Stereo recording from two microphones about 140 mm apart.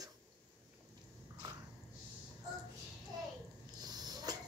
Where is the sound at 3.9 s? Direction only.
30° right (ahead or behind).